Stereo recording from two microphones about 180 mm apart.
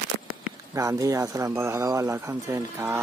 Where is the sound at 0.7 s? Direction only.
15° right (ahead or behind).